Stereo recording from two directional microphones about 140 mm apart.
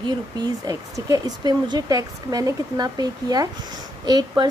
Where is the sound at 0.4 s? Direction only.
25° right (ahead or behind).